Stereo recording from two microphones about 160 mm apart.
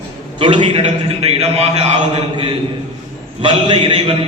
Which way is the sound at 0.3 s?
30° right (ahead or behind).